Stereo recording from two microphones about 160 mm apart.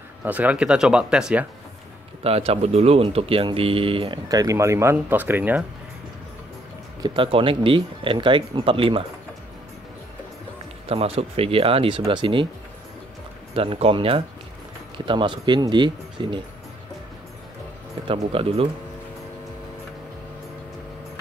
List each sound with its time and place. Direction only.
0.2 s speech: 10° right (ahead or behind)
2.2 s speech: 40° right (ahead or behind); by 5.7 s 10° right (ahead or behind)
7.0 s speech: 35° right (ahead or behind)
10.9 s speech: 40° right (ahead or behind)
13.6 s speech: 35° right (ahead or behind)
18.0 s speech: 35° right (ahead or behind)